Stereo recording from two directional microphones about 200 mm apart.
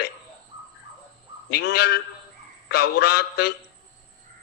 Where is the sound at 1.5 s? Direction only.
55° left (ahead or behind).